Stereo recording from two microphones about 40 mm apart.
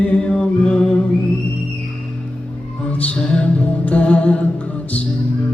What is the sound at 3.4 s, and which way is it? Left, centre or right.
Music, left.